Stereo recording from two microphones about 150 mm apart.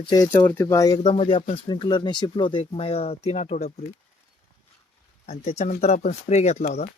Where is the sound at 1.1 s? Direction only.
35° left (ahead or behind).